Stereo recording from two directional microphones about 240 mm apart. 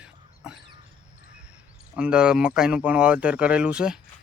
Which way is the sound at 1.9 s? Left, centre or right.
Centre.